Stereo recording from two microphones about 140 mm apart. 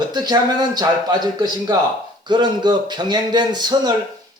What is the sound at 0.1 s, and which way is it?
A man's voice, 30° right (ahead or behind).